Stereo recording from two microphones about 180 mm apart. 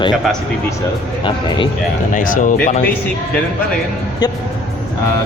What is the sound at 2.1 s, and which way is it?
Speech, 45° left (ahead or behind).